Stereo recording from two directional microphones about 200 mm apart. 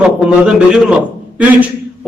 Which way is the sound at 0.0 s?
5° right (ahead or behind).